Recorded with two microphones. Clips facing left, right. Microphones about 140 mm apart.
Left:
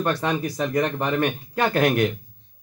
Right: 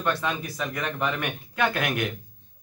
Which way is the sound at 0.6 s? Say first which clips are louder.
Left 6 dB; 35° left (ahead or behind).